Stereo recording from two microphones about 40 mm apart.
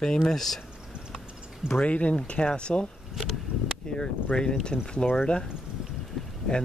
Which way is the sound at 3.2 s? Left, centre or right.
Centre.